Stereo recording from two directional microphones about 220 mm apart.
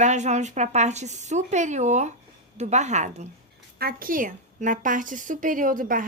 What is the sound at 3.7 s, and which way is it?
A woman's voice, 40° right (ahead or behind).